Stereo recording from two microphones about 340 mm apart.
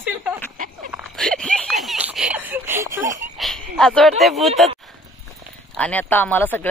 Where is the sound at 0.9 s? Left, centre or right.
Centre.